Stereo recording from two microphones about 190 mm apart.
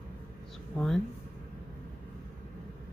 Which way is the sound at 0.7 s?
Centre (ahead or behind).